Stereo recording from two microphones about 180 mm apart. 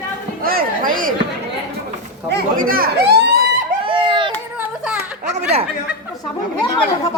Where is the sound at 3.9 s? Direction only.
25° right (ahead or behind).